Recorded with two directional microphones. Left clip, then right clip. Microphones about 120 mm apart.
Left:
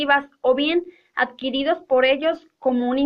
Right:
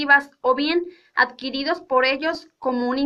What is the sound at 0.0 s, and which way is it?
A woman's voice, 25° left (ahead or behind).